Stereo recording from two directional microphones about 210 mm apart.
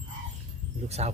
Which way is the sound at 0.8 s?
30° right (ahead or behind).